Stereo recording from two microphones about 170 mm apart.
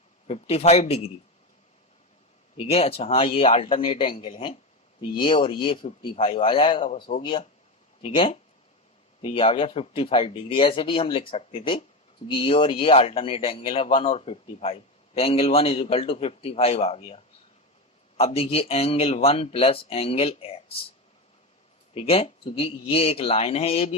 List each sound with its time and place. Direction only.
0.3 s speech: 35° left (ahead or behind)
2.6 s speech: 35° left (ahead or behind)
18.2 s speech: 35° left (ahead or behind)
21.9 s speech: 35° left (ahead or behind)